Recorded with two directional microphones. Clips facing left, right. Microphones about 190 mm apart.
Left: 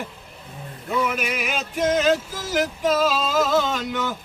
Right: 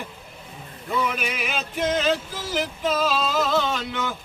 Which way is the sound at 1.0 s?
5° left (ahead or behind).